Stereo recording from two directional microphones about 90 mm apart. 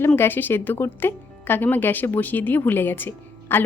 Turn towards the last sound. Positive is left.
turn(degrees=25)  # may be behind; listen again after turning